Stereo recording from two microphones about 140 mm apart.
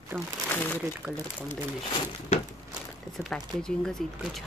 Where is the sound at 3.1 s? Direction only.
5° left (ahead or behind).